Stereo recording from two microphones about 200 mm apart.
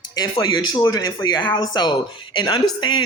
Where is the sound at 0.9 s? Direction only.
20° left (ahead or behind).